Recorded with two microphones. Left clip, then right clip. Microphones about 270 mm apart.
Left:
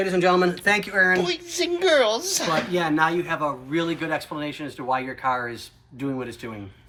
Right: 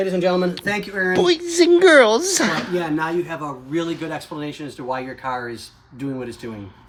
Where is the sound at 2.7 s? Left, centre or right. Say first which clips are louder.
Even; centre.